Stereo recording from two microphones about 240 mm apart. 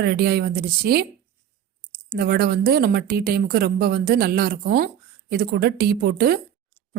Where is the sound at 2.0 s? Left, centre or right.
Right.